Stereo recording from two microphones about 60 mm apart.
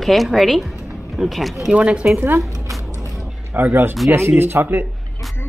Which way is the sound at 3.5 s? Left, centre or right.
Right.